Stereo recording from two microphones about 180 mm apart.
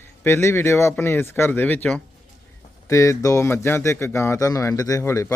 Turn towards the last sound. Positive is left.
turn(degrees=15)  # may be behind; listen again after turning